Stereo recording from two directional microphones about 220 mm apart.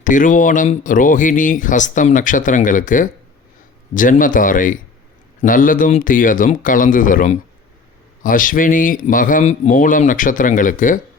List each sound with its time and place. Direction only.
0.0 s speech: 35° left (ahead or behind)